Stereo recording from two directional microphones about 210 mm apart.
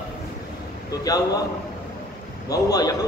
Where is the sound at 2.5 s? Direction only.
15° left (ahead or behind).